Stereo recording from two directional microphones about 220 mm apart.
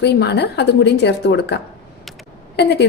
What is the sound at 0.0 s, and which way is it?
A woman's voice, 50° left (ahead or behind).